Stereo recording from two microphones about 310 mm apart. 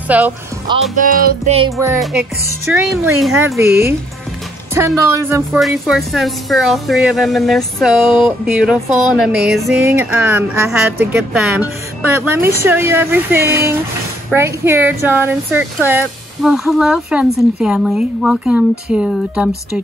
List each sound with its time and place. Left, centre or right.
0.1 s a woman's voice: centre
0.9 s music: right
1.8 s a woman's voice: centre